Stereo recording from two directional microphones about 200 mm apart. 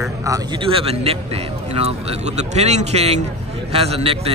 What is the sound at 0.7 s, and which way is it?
A man's voice, 30° right (ahead or behind).